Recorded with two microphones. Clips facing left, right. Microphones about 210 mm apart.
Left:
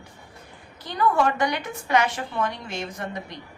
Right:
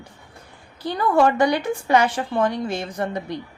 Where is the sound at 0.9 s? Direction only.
30° right (ahead or behind).